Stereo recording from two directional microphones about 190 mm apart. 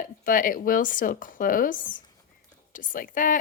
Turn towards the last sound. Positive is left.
turn(degrees=45)  # may be behind; listen again after turning